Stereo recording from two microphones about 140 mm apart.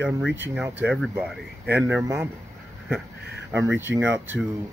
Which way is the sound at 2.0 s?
20° right (ahead or behind).